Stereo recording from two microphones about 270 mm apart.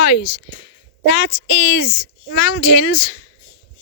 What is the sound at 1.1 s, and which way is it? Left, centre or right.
Speech, left.